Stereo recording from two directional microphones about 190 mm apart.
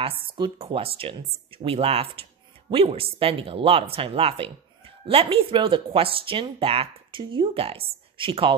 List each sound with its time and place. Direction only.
0.4 s speech: 30° right (ahead or behind)